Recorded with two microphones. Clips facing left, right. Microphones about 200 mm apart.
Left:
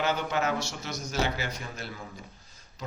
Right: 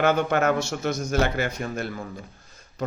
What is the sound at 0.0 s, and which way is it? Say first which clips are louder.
Speech: right 7 dB; 55° right (ahead or behind).